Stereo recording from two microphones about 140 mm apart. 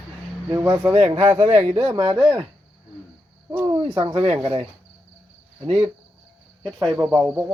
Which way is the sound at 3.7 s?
40° right (ahead or behind).